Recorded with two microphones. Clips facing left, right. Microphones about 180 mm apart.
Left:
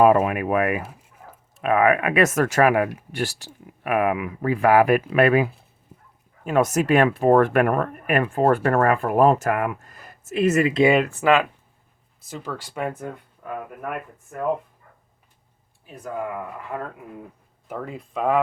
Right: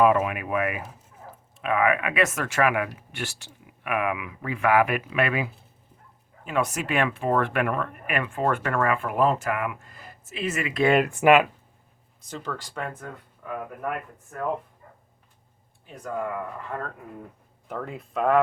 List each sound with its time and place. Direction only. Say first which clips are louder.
0.2 s speech: left 5 dB; 50° left (ahead or behind)
10.8 s speech: right 1 dB; centre (ahead or behind)
11.1 s speech: right 1 dB; 15° right (ahead or behind)
12.2 s speech: left 1 dB; 5° left (ahead or behind)
16.0 s speech: left 1 dB; 15° left (ahead or behind)